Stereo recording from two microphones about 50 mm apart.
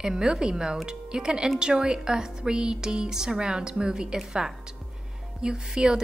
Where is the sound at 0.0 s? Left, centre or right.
Centre.